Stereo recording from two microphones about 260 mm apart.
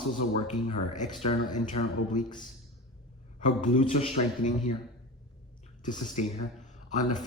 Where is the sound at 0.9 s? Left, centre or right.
Left.